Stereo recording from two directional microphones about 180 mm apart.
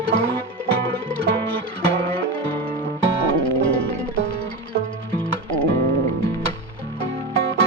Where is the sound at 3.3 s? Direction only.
55° left (ahead or behind).